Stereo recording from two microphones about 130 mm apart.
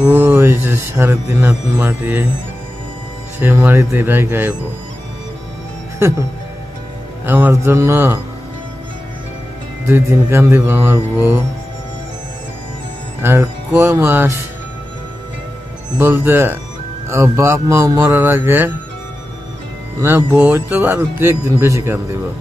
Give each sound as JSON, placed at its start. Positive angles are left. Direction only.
{"t": 0.0, "sound": "speech", "side_deg": -15}
{"t": 3.3, "sound": "music", "side_deg": -15}
{"t": 5.9, "sound": "speech", "side_deg": -20}
{"t": 7.2, "sound": "speech", "side_deg": -15}
{"t": 9.8, "sound": "music", "side_deg": -20}
{"t": 13.2, "sound": "music", "side_deg": -20}
{"t": 16.0, "sound": "music", "side_deg": -15}
{"t": 17.1, "sound": "speech", "side_deg": -20}
{"t": 20.0, "sound": "speech", "side_deg": -15}